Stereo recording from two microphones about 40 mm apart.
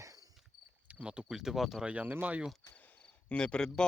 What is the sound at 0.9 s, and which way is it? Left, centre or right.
Speech, right.